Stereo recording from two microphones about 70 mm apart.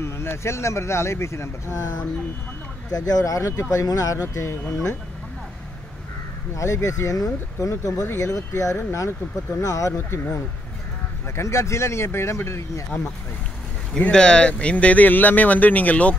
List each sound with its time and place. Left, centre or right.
0.0 s speech: left
6.5 s speech: left
11.3 s speech: left
14.1 s speech: centre